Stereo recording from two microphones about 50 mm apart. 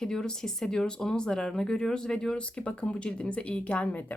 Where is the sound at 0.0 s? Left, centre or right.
Centre.